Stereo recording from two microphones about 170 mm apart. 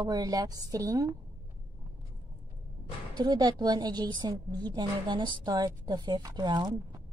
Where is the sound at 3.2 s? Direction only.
25° right (ahead or behind).